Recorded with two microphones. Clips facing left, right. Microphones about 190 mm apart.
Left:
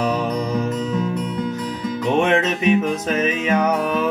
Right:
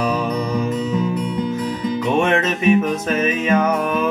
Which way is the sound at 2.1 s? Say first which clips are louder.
Left 2 dB; 20° left (ahead or behind).